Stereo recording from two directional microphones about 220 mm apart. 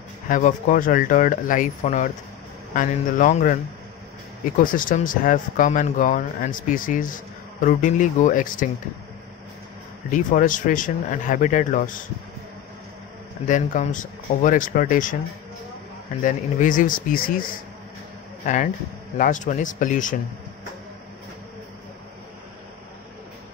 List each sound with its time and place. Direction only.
0.3 s speech: 35° left (ahead or behind)
4.6 s speech: 40° left (ahead or behind)
10.1 s speech: 35° left (ahead or behind)
13.5 s speech: 35° left (ahead or behind)
16.2 s speech: 35° left (ahead or behind)